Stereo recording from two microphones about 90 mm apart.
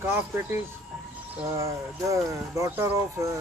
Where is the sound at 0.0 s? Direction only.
25° right (ahead or behind).